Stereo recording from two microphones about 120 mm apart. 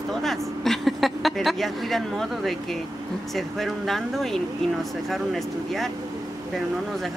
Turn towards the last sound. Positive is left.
turn(degrees=0)  # may be behind; listen again after turning